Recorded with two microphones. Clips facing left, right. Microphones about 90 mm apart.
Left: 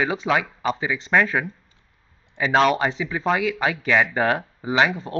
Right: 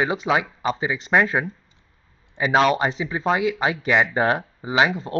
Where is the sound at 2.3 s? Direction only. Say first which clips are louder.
Even; 10° right (ahead or behind).